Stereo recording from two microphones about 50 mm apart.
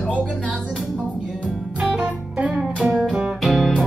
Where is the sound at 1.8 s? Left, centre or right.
Centre.